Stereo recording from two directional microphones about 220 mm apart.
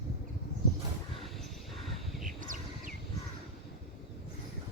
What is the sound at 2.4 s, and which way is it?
Bird, 35° right (ahead or behind).